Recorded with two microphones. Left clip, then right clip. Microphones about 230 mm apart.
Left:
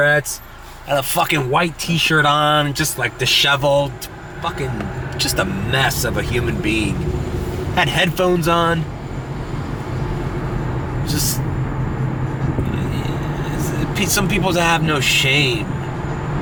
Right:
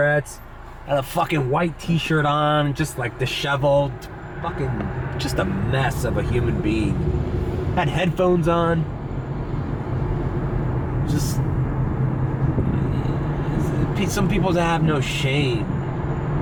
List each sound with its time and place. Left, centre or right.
0.0 s speech: centre
6.5 s speech: centre
13.7 s speech: centre